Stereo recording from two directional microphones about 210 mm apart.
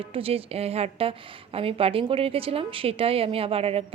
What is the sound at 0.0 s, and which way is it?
A woman's voice, 25° right (ahead or behind).